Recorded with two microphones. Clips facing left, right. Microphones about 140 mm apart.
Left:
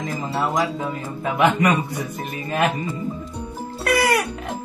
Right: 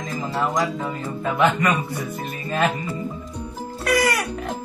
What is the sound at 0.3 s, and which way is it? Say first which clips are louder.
Speech: even; 5° left (ahead or behind).